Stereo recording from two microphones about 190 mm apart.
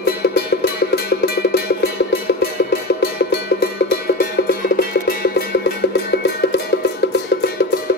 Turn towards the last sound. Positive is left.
turn(degrees=60)  # may be behind; listen again after turning